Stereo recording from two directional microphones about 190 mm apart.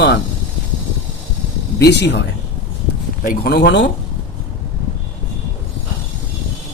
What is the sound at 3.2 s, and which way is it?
Speech, 55° left (ahead or behind).